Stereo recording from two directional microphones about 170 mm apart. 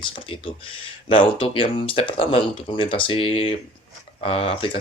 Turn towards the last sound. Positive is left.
turn(degrees=35)  # may be behind; listen again after turning